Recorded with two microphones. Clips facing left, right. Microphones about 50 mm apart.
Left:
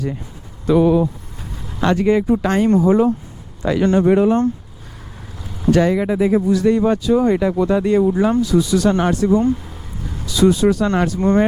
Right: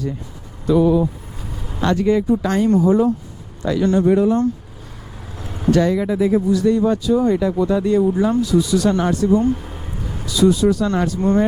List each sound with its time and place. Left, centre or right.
0.7 s speech: left
1.8 s speech: left
5.4 s vehicle: right
5.7 s speech: left
6.5 s speech: left
9.5 s vehicle: right
10.2 s speech: left